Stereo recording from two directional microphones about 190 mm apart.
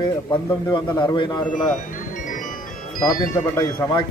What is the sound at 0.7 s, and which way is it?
Speech, 25° left (ahead or behind).